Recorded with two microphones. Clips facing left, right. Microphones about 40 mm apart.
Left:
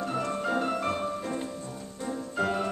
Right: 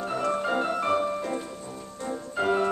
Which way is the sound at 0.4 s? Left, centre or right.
Centre.